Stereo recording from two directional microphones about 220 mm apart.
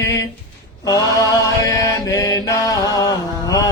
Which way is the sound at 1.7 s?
15° left (ahead or behind).